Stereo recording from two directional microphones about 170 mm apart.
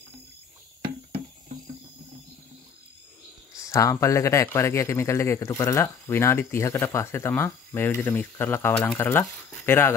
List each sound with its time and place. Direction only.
3.5 s speech: 20° left (ahead or behind)